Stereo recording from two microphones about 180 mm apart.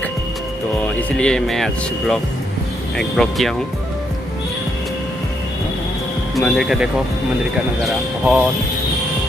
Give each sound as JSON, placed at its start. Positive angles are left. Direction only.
{"t": 0.7, "sound": "speech", "side_deg": 5}
{"t": 6.3, "sound": "speech", "side_deg": 0}